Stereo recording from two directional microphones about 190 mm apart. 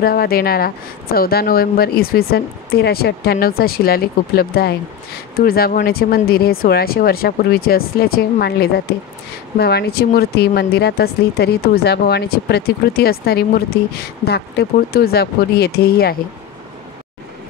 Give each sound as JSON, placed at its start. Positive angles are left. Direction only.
{"t": 0.0, "sound": "a woman's voice", "side_deg": 50}